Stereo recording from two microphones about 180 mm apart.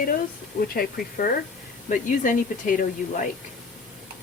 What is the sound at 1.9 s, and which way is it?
Speech, 45° left (ahead or behind).